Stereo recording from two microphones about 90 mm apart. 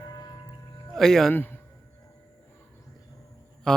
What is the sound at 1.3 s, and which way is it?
Speech, 20° left (ahead or behind).